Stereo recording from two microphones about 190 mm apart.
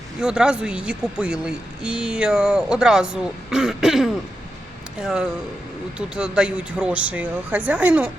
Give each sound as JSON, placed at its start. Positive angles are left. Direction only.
{"t": 0.2, "sound": "speech", "side_deg": -5}